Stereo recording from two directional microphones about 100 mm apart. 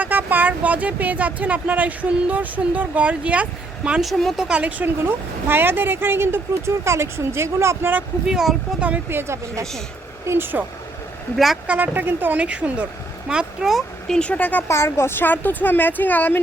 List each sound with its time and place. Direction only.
0.0 s speech: 20° right (ahead or behind)
4.2 s speech: centre (ahead or behind)
4.4 s speech: 10° right (ahead or behind)
8.3 s speech: 5° right (ahead or behind)
9.0 s speech: 25° right (ahead or behind); by 14.2 s centre (ahead or behind)
14.2 s speech: 15° left (ahead or behind)
14.7 s speech: 30° left (ahead or behind)